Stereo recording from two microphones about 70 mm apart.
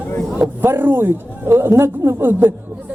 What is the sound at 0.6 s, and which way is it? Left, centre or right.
A man's voice, right.